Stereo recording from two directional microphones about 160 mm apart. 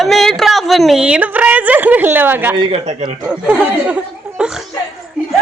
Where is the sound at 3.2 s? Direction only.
5° right (ahead or behind).